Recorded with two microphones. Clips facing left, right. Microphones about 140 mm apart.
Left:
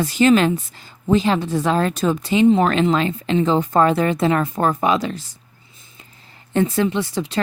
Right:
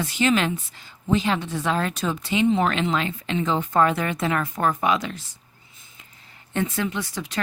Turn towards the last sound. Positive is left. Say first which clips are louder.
# left 7 dB
turn(degrees=30)  # may be behind; listen again after turning